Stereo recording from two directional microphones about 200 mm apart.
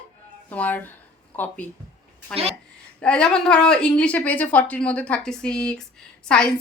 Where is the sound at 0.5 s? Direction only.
10° left (ahead or behind).